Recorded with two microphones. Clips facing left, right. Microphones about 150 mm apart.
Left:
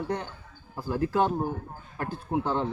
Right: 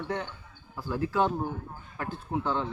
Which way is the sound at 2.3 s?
35° left (ahead or behind).